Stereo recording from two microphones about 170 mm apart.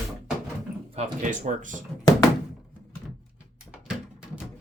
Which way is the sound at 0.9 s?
45° right (ahead or behind).